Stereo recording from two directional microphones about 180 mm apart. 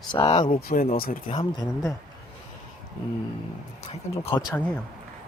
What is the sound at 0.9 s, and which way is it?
Speech, 55° left (ahead or behind).